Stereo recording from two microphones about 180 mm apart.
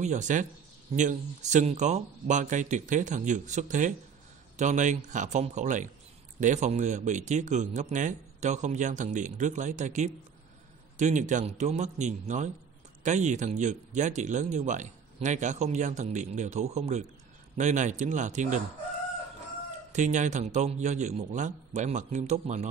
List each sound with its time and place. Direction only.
0.0 s speech: 40° right (ahead or behind)
19.9 s speech: 40° right (ahead or behind)